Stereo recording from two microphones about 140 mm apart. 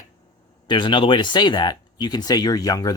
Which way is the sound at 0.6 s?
35° left (ahead or behind).